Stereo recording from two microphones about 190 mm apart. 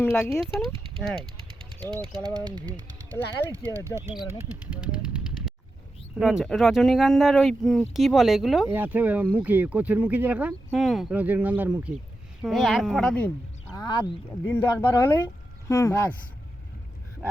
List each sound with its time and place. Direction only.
0.0 s speech: 10° left (ahead or behind)
0.3 s speech: centre (ahead or behind)
2.4 s speech: 5° left (ahead or behind)
2.7 s pigeon: 20° right (ahead or behind)
3.7 s speech: 15° right (ahead or behind)
4.7 s machine gun: 5° right (ahead or behind)
6.1 s speech: 5° right (ahead or behind)
13.7 s speech: 25° left (ahead or behind)
14.4 s speech: 15° left (ahead or behind)